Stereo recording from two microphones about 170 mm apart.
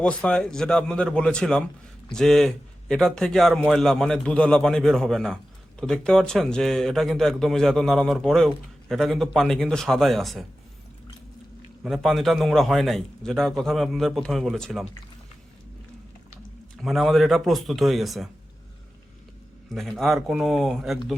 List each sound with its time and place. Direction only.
0.0 s speech: 5° left (ahead or behind)
11.8 s speech: centre (ahead or behind)
16.7 s speech: centre (ahead or behind)
19.7 s speech: centre (ahead or behind)